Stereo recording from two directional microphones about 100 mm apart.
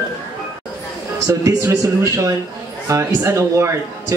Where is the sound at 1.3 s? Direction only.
35° right (ahead or behind).